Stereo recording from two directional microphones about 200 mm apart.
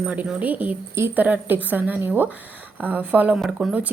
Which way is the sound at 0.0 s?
5° right (ahead or behind).